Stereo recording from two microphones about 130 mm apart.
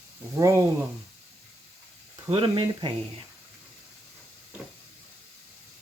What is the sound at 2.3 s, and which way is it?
Speech, 40° right (ahead or behind).